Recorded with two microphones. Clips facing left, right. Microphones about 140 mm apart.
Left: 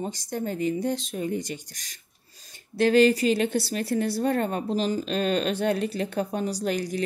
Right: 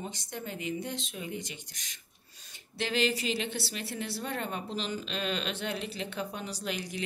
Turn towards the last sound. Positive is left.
turn(degrees=40)  # may be behind; listen again after turning